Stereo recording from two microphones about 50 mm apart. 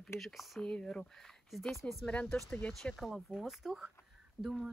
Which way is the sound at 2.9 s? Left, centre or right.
Centre.